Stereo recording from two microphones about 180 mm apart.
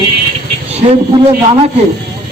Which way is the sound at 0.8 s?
30° right (ahead or behind).